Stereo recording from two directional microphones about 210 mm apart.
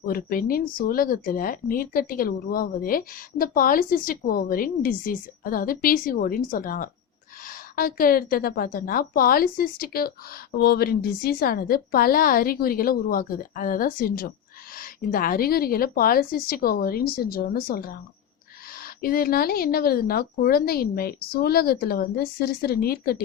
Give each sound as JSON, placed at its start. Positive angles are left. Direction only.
{"t": 0.0, "sound": "speech", "side_deg": 45}